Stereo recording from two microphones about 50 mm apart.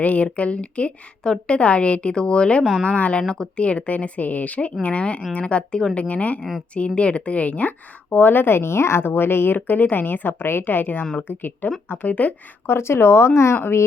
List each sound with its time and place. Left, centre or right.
0.0 s a woman's voice: left
12.6 s speech: left